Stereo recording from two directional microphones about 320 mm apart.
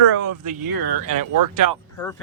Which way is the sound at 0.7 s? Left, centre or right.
Right.